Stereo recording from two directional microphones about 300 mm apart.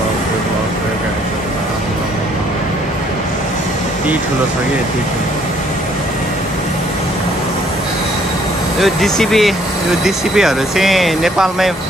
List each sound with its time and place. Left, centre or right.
8.7 s speech: centre